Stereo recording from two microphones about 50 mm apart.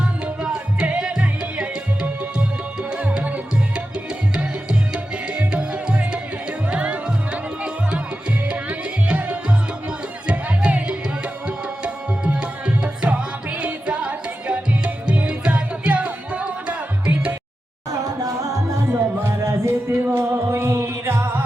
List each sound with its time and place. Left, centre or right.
0.0 s music: centre
5.3 s music: right
9.0 s music: right
11.4 s tabla: right
13.8 s music: centre
18.9 s music: right